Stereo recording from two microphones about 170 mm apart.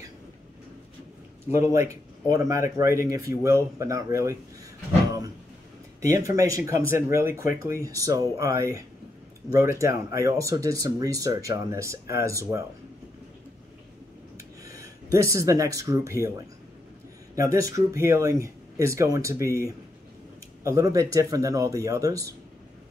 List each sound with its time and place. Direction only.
1.6 s speech: 20° right (ahead or behind)
5.9 s speech: 20° right (ahead or behind)
14.6 s speech: 20° right (ahead or behind)
20.6 s speech: 20° right (ahead or behind)